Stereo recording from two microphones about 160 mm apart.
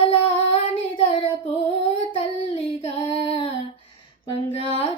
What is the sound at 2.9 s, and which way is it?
Child singing, 40° left (ahead or behind).